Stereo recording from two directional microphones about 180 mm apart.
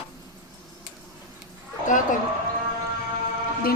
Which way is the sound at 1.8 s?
45° left (ahead or behind).